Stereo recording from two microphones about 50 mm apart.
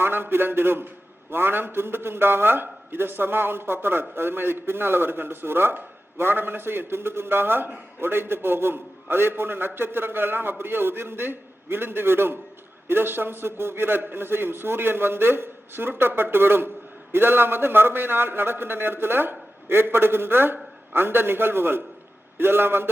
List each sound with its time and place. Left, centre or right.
0.0 s a man's voice: right